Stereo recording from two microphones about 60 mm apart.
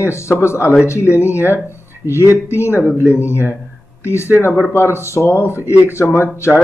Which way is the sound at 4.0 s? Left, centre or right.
Left.